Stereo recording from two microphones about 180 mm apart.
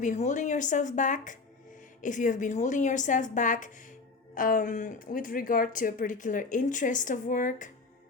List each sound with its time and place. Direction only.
0.0 s speech: 40° left (ahead or behind)